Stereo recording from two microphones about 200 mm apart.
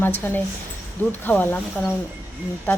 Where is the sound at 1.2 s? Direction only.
10° left (ahead or behind).